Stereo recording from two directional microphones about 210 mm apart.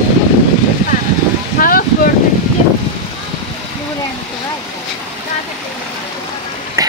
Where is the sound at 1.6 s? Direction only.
40° left (ahead or behind).